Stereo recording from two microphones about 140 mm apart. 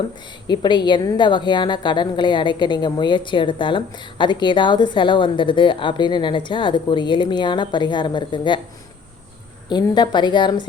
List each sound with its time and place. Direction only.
0.4 s a woman's voice: 30° left (ahead or behind)
9.6 s a woman's voice: 30° left (ahead or behind)